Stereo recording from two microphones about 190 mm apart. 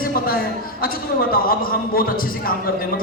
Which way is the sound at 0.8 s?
50° left (ahead or behind).